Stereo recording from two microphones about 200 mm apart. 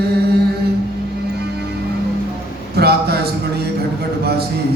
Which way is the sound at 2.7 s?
55° right (ahead or behind).